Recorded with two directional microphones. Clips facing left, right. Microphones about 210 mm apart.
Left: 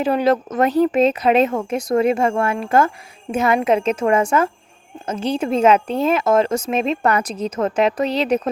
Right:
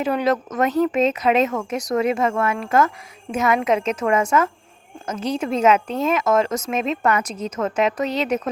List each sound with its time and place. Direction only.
0.0 s a woman's voice: 30° left (ahead or behind)